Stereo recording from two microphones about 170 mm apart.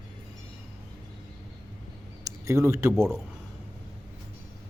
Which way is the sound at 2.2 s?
15° right (ahead or behind).